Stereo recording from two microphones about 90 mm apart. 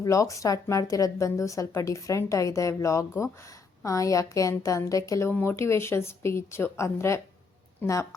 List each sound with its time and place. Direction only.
0.0 s speech: 35° left (ahead or behind)
5.3 s a woman's voice: 25° left (ahead or behind)